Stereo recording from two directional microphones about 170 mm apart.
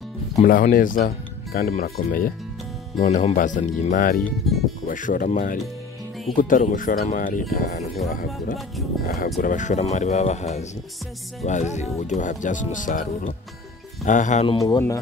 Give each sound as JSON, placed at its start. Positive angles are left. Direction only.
{"t": 0.4, "sound": "speech", "side_deg": 50}
{"t": 3.0, "sound": "speech", "side_deg": 45}
{"t": 14.5, "sound": "speech", "side_deg": 25}